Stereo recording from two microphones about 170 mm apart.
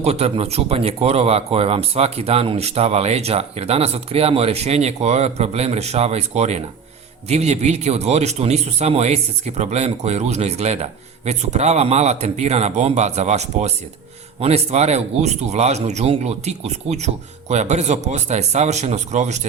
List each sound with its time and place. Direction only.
0.0 s speech: 35° right (ahead or behind)